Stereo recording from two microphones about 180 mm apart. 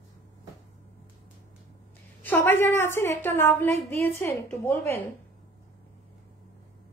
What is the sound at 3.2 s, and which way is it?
Speech, 10° left (ahead or behind).